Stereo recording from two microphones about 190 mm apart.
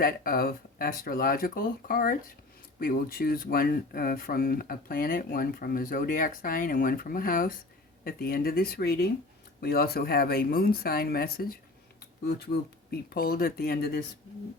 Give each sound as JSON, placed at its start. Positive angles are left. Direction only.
{"t": 0.0, "sound": "speech", "side_deg": 50}